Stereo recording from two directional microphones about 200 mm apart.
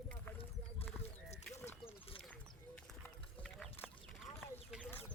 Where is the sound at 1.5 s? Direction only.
10° left (ahead or behind).